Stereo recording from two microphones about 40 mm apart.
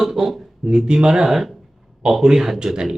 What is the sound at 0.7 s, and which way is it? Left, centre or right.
A man's voice, centre.